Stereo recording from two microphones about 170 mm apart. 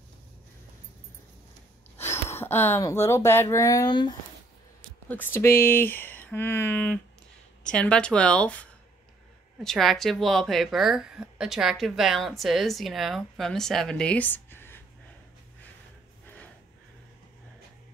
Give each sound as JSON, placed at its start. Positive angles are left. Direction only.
{"t": 2.0, "sound": "speech", "side_deg": 15}
{"t": 5.1, "sound": "a woman's voice", "side_deg": 10}